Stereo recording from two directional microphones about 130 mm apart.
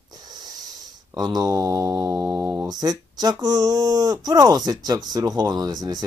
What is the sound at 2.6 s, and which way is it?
Speech, 30° right (ahead or behind).